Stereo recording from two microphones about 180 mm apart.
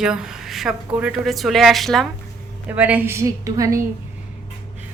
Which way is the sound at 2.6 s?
10° right (ahead or behind).